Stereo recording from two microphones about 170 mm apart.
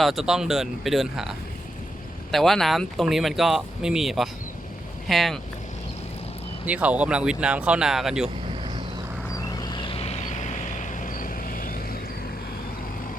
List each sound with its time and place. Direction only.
0.0 s speech: centre (ahead or behind)
6.7 s speech: 10° right (ahead or behind)
9.5 s vehicle: 25° left (ahead or behind); by 11.9 s 55° left (ahead or behind)